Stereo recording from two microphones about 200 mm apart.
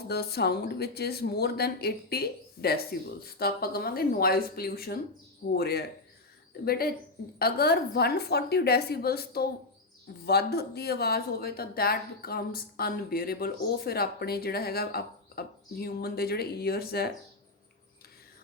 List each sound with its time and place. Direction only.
0.1 s speech: 55° left (ahead or behind)